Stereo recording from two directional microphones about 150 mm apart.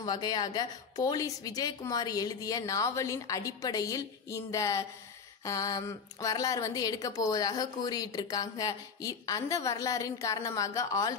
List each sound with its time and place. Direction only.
0.0 s speech: 30° left (ahead or behind)